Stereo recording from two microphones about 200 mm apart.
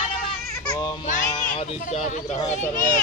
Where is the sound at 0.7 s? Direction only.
20° left (ahead or behind).